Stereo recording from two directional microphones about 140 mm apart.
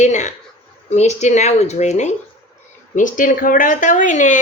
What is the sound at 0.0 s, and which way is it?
Speech, 55° left (ahead or behind).